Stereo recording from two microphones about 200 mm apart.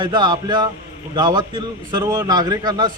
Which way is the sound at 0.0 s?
20° right (ahead or behind).